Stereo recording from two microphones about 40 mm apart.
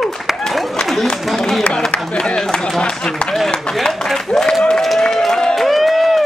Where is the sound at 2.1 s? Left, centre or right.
Left.